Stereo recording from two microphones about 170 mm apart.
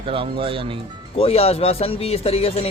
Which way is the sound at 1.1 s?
35° left (ahead or behind).